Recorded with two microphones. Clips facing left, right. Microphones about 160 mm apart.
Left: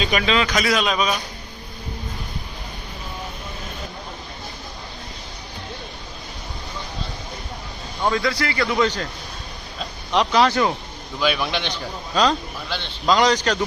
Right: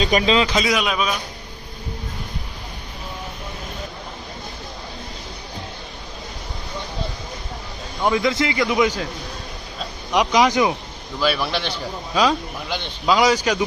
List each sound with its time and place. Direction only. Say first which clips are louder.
0.0 s speech: right 3 dB; 35° right (ahead or behind)
0.7 s a man's voice: left 1 dB; 10° right (ahead or behind)
8.0 s a man's voice: right 2 dB; 20° right (ahead or behind)
10.1 s a man's voice: right 1 dB; 10° right (ahead or behind)
11.2 s a man's voice: right 1 dB; centre (ahead or behind)